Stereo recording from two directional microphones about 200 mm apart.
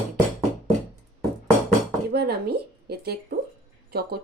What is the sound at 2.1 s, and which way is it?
A woman's voice, 55° right (ahead or behind).